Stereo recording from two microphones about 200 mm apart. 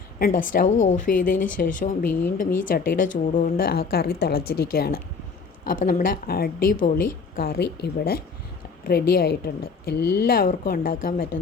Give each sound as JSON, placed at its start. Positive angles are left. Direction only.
{"t": 0.2, "sound": "a woman's voice", "side_deg": 40}